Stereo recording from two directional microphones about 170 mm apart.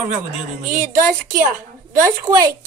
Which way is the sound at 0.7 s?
50° right (ahead or behind).